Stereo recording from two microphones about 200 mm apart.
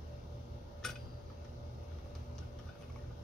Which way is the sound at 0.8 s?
Centre (ahead or behind).